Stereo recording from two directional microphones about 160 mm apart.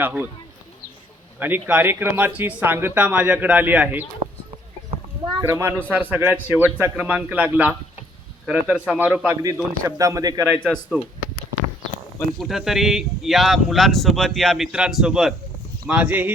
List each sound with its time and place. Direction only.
0.0 s speech: 10° right (ahead or behind)
1.4 s speech: 10° right (ahead or behind)
5.3 s speech: 20° right (ahead or behind)
9.8 s speech: 20° right (ahead or behind)
10.6 s speech: 5° left (ahead or behind)
12.4 s speech: centre (ahead or behind)